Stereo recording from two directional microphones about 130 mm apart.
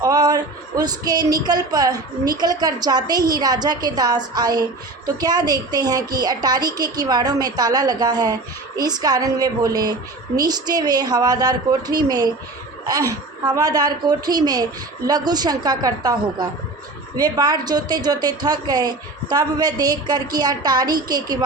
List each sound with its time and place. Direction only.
0.0 s a woman's voice: 30° right (ahead or behind)